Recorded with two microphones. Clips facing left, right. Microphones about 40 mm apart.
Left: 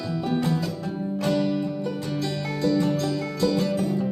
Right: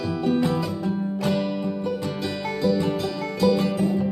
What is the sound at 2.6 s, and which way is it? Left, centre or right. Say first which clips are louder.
Music: even; centre.